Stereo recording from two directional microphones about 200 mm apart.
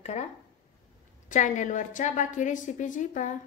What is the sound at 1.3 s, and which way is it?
A woman's voice, 40° left (ahead or behind).